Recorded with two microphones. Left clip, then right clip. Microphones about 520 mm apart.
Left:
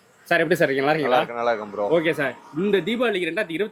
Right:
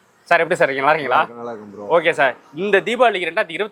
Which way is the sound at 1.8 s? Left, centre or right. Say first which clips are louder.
Right 6 dB; right.